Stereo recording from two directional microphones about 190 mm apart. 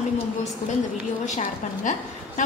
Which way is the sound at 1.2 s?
40° left (ahead or behind).